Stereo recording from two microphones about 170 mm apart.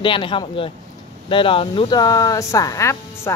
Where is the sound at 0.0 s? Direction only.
30° left (ahead or behind).